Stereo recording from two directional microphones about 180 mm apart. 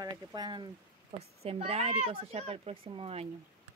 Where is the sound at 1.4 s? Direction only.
35° right (ahead or behind).